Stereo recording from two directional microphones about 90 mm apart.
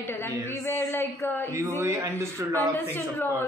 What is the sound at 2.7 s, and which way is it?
Speech, 25° left (ahead or behind).